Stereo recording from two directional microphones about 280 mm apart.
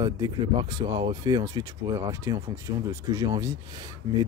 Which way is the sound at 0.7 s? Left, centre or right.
Centre.